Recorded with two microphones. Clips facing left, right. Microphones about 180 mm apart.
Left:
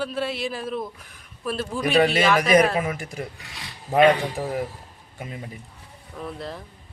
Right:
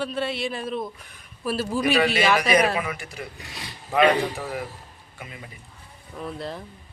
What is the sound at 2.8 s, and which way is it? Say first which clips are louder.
Speech: left 3 dB; 45° left (ahead or behind).